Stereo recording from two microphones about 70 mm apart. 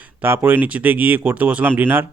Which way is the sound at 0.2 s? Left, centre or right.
Right.